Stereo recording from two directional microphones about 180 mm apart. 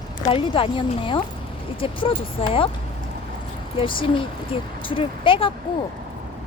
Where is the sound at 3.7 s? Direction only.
30° left (ahead or behind).